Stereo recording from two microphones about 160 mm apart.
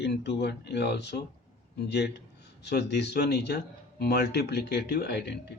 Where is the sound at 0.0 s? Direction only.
90° left.